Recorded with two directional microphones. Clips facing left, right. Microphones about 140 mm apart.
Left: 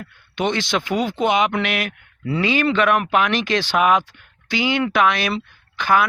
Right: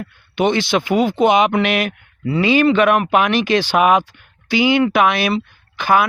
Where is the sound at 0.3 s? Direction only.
10° right (ahead or behind).